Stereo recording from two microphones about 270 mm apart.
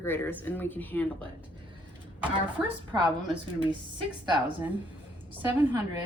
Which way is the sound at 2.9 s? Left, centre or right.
Centre.